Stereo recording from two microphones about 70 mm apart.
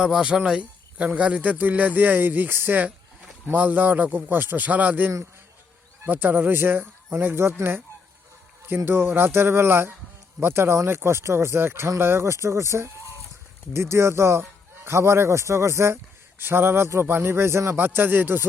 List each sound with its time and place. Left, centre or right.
0.0 s speech: centre; by 7.5 s right
8.6 s speech: right
16.4 s speech: right
17.7 s speech: right